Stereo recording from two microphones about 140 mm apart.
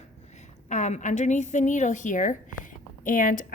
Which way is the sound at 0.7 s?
55° left (ahead or behind).